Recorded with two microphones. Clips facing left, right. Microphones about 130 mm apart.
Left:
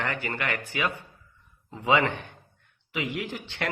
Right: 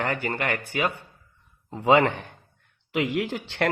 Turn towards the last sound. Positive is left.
turn(degrees=-50)  # may be behind; listen again after turning